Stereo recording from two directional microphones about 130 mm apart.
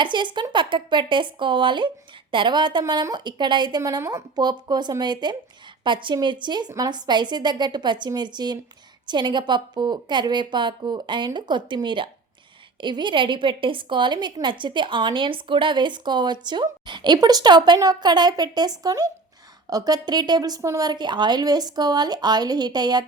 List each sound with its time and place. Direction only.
0.0 s a woman's voice: 35° right (ahead or behind)